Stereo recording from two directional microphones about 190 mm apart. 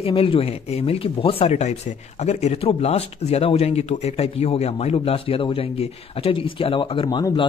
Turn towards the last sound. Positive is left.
turn(degrees=25)  # may be behind; listen again after turning